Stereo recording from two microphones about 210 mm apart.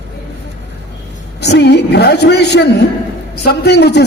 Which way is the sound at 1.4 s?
55° left (ahead or behind).